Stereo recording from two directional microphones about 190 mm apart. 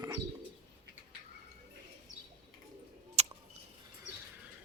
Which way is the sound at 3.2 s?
35° right (ahead or behind).